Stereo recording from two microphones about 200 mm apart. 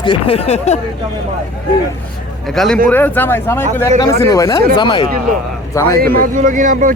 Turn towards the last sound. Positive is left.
turn(degrees=-40)  # may be behind; listen again after turning